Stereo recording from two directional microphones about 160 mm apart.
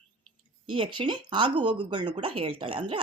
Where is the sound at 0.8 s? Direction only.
30° right (ahead or behind).